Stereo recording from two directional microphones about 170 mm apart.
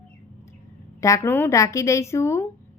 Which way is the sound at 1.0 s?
20° left (ahead or behind).